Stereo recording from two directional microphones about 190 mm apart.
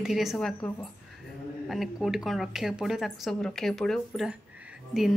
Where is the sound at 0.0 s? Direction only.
Centre (ahead or behind).